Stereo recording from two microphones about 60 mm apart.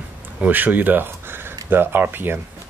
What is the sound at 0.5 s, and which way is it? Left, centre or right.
Speech, right.